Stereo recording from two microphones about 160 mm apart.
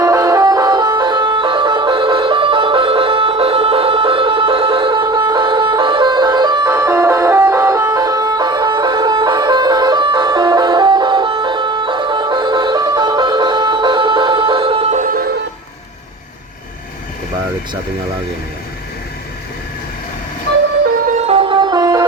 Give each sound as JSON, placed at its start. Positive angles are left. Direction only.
{"t": 0.0, "sound": "music", "side_deg": -20}
{"t": 6.7, "sound": "music", "side_deg": -15}
{"t": 14.9, "sound": "music", "side_deg": -60}
{"t": 21.1, "sound": "music", "side_deg": -45}